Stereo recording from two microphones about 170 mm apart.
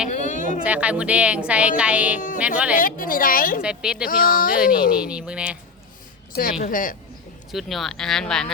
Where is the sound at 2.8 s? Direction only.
55° left (ahead or behind).